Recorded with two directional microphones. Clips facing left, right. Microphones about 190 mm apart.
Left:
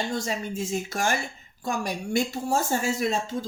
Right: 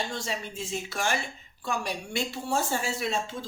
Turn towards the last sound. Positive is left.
turn(degrees=45)  # may be behind; listen again after turning